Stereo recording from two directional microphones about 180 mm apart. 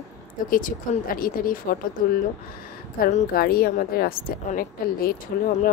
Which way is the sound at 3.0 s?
45° left (ahead or behind).